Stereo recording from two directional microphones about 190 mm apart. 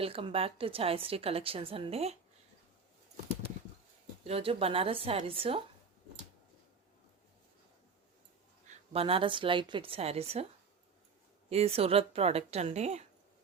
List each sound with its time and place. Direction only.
0.0 s a woman's voice: 30° right (ahead or behind)
4.2 s a woman's voice: 30° right (ahead or behind)
8.6 s a woman's voice: 30° right (ahead or behind)
11.4 s a woman's voice: 30° right (ahead or behind)